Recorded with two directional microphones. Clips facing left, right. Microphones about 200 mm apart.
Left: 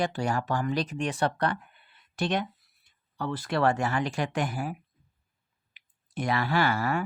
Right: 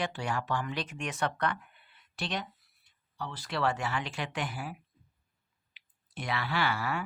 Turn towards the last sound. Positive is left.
turn(degrees=45)  # may be behind; listen again after turning